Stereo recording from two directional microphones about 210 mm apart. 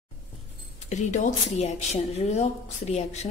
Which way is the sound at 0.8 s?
35° left (ahead or behind).